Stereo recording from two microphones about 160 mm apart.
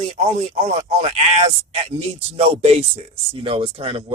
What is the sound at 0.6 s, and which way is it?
Speech, 40° right (ahead or behind).